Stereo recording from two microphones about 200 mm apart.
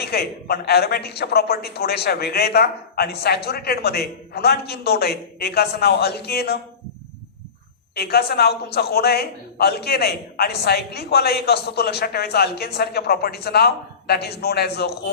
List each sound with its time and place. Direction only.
0.0 s a woman's voice: 50° left (ahead or behind)
7.9 s a woman's voice: 50° left (ahead or behind)